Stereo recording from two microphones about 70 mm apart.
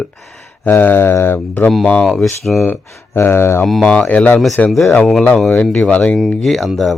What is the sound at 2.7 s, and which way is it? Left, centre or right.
Speech, left.